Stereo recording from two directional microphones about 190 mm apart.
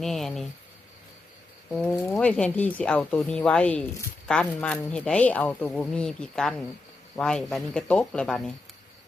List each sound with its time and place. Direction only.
0.0 s speech: centre (ahead or behind)
1.7 s speech: 5° left (ahead or behind)